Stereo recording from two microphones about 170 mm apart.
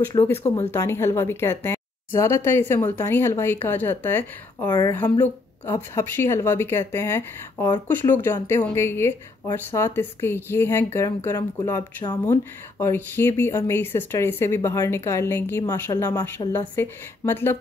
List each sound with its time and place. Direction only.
0.1 s speech: 15° left (ahead or behind)